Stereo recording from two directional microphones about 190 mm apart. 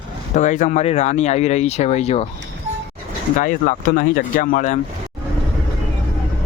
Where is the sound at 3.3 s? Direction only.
45° left (ahead or behind).